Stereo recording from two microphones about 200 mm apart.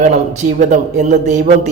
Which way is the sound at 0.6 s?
35° right (ahead or behind).